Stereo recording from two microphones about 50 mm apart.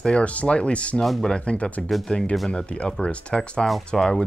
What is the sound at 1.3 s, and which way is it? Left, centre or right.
Speech, left.